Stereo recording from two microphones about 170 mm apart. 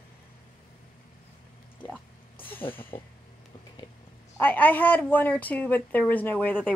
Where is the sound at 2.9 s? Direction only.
30° left (ahead or behind).